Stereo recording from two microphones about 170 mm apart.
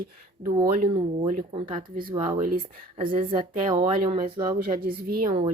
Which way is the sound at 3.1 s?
55° right (ahead or behind).